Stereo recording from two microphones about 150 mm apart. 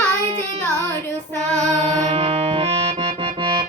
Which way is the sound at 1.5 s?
45° right (ahead or behind).